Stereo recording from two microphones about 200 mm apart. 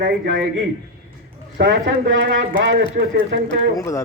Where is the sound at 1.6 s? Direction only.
65° right (ahead or behind).